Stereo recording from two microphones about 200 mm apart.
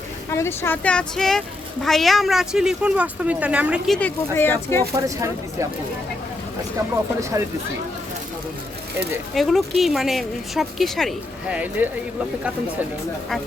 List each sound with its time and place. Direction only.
0.3 s a woman's voice: 10° left (ahead or behind)
4.9 s speech: 15° right (ahead or behind)
7.2 s speech: 15° right (ahead or behind)
9.3 s a woman's voice: centre (ahead or behind)